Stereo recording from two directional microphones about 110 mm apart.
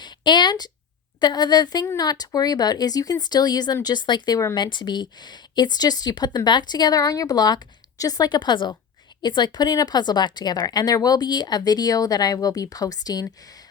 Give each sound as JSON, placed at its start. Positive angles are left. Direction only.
{"t": 0.0, "sound": "speech", "side_deg": 40}